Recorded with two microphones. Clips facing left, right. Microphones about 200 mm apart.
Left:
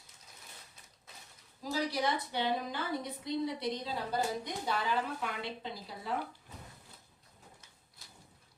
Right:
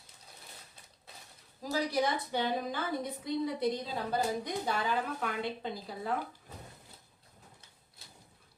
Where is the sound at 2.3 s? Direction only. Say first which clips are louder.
Right 1 dB; 45° right (ahead or behind).